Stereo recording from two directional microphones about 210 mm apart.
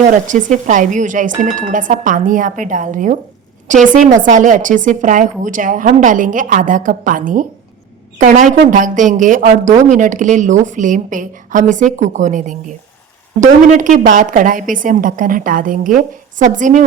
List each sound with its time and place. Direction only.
0.3 s speech: 35° right (ahead or behind)